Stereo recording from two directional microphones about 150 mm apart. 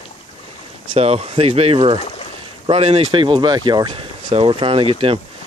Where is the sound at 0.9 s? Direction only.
40° right (ahead or behind).